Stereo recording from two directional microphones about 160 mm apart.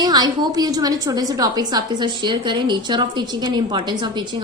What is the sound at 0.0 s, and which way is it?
A woman's voice, 25° right (ahead or behind).